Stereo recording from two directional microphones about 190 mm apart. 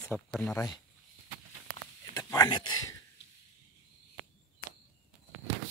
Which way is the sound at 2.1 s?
20° left (ahead or behind).